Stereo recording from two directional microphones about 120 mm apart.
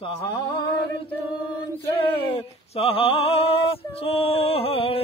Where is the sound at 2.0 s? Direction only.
50° left (ahead or behind).